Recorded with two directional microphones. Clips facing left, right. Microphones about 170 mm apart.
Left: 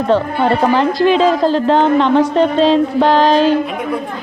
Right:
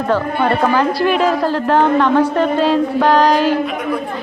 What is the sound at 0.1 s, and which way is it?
A woman's voice, 25° left (ahead or behind).